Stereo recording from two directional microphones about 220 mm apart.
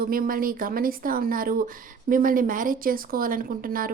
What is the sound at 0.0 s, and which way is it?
Speech, 40° right (ahead or behind).